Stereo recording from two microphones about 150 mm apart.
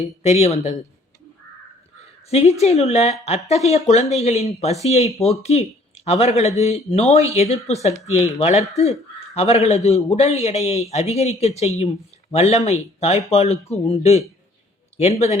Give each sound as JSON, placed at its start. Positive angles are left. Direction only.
{"t": 0.0, "sound": "a man's voice", "side_deg": 45}
{"t": 2.3, "sound": "a man's voice", "side_deg": 45}